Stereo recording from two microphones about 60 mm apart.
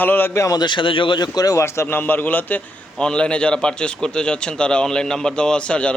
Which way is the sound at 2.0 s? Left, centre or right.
Left.